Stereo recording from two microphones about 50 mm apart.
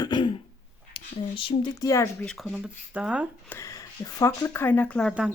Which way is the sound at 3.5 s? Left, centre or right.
Left.